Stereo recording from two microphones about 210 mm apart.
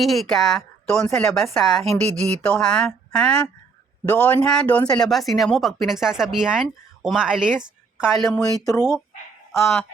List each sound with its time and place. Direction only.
0.0 s speech: centre (ahead or behind)
1.8 s speech: 30° right (ahead or behind)
2.4 s speech: 5° left (ahead or behind)
8.4 s speech: 15° left (ahead or behind)